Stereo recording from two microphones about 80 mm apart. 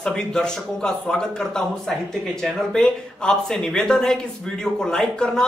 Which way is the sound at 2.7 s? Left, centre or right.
Centre.